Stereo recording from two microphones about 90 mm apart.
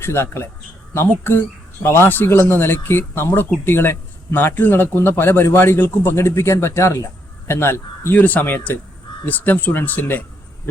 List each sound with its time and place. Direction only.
0.0 s speech: 25° left (ahead or behind)